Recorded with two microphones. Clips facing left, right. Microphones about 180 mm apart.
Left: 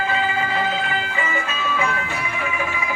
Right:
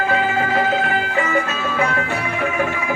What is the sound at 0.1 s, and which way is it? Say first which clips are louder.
Music: right 4 dB; 55° right (ahead or behind).